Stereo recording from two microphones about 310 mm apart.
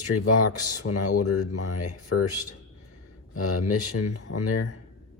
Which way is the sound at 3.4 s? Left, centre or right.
Left.